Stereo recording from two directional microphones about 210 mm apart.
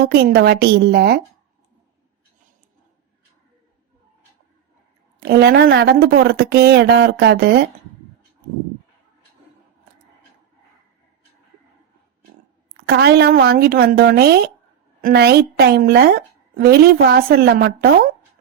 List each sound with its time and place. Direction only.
0.0 s a woman's voice: 50° right (ahead or behind)
5.2 s a woman's voice: 50° right (ahead or behind)
12.7 s a woman's voice: 50° right (ahead or behind)